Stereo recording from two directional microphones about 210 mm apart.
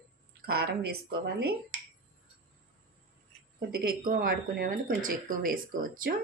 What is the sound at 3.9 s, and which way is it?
Speech, 45° right (ahead or behind).